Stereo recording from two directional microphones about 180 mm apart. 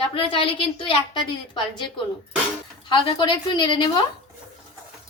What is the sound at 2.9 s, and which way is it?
A woman's voice, 25° left (ahead or behind).